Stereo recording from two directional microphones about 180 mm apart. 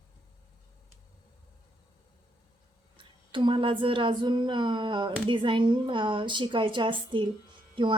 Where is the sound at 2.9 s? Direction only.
25° right (ahead or behind).